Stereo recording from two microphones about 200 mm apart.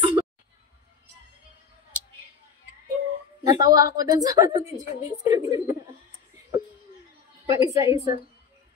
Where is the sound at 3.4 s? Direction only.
20° right (ahead or behind).